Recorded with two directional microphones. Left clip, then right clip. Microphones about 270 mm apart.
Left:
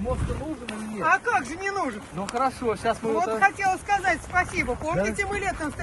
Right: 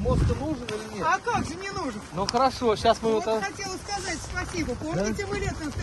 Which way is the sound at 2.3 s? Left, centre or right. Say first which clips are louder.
Right 2 dB; right.